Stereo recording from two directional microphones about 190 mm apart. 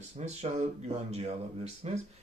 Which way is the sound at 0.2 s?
35° right (ahead or behind).